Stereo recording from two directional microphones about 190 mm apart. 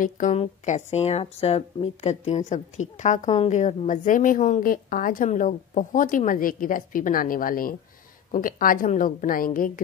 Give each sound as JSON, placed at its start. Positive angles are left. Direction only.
{"t": 0.3, "sound": "a woman's voice", "side_deg": 35}